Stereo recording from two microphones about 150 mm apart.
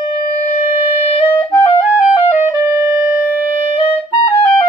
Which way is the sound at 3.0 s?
10° right (ahead or behind).